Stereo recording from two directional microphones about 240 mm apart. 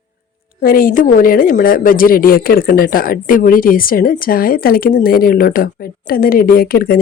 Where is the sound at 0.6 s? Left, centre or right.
Left.